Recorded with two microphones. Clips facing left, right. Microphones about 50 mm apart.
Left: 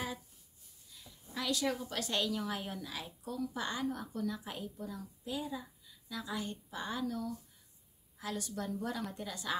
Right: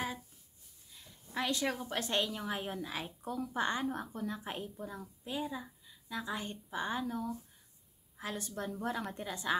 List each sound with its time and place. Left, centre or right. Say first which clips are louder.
1.3 s a woman's voice: right 1 dB; right